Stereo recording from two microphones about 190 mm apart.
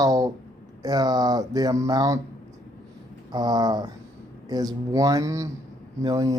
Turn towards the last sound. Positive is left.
turn(degrees=-20)  # may be behind; listen again after turning